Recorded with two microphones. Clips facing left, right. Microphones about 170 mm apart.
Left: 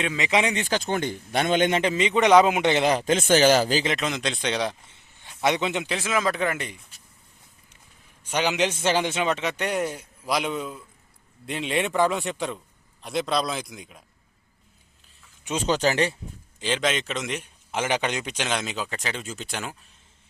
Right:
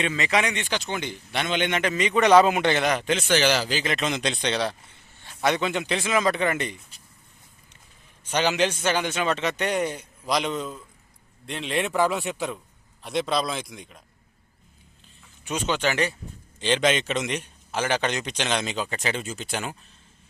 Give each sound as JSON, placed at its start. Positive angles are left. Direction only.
{"t": 0.0, "sound": "a man's voice", "side_deg": 5}
{"t": 0.3, "sound": "speech", "side_deg": 25}
{"t": 0.9, "sound": "speech", "side_deg": 45}
{"t": 1.8, "sound": "a man's voice", "side_deg": 25}
{"t": 3.0, "sound": "speech", "side_deg": 45}
{"t": 4.0, "sound": "speech", "side_deg": 0}
{"t": 4.5, "sound": "a man's voice", "side_deg": 15}
{"t": 4.9, "sound": "a sound", "side_deg": 20}
{"t": 5.8, "sound": "speech", "side_deg": 5}
{"t": 8.2, "sound": "a man's voice", "side_deg": 10}
{"t": 9.2, "sound": "a man's voice", "side_deg": 10}
{"t": 15.6, "sound": "speech", "side_deg": 35}
{"t": 16.6, "sound": "speech", "side_deg": 5}
{"t": 17.7, "sound": "speech", "side_deg": 15}